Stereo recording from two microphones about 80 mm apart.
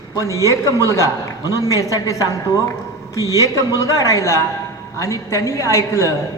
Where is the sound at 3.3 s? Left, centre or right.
Left.